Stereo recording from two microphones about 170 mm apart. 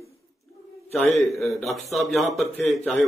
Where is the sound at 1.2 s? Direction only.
Centre (ahead or behind).